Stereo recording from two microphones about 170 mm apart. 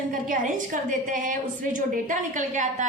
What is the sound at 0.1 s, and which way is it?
A woman's voice, 50° right (ahead or behind).